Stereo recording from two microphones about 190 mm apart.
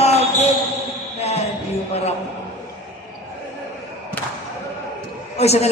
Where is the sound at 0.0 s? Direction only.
35° left (ahead or behind).